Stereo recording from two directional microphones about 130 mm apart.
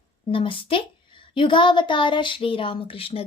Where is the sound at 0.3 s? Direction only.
40° left (ahead or behind).